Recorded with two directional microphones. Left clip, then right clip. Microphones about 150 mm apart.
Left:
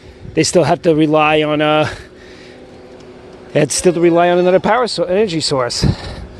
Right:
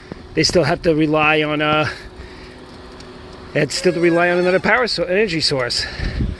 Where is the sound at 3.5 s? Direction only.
35° left (ahead or behind).